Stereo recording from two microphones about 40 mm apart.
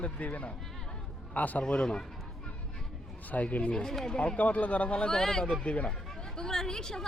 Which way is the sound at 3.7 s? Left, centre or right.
Left.